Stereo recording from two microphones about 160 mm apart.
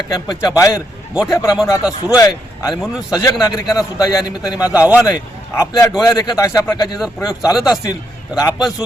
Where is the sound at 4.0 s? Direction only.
25° left (ahead or behind).